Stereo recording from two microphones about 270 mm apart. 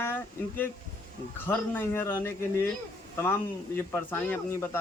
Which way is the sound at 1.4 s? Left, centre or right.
Centre.